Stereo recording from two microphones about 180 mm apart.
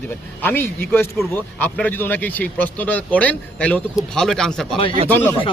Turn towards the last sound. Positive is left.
turn(degrees=10)  # may be behind; listen again after turning